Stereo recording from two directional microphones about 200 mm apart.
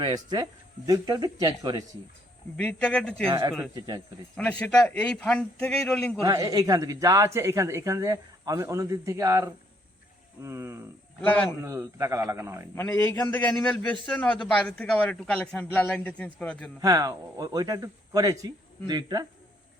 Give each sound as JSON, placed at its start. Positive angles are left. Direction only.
{"t": 0.0, "sound": "speech", "side_deg": -20}
{"t": 2.6, "sound": "a man's voice", "side_deg": 5}
{"t": 3.8, "sound": "speech", "side_deg": -20}
{"t": 4.6, "sound": "a man's voice", "side_deg": 5}
{"t": 6.2, "sound": "speech", "side_deg": -15}
{"t": 12.7, "sound": "a man's voice", "side_deg": 15}
{"t": 16.8, "sound": "speech", "side_deg": -15}